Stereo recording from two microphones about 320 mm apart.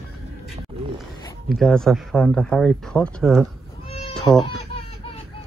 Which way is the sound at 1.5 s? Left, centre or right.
Centre.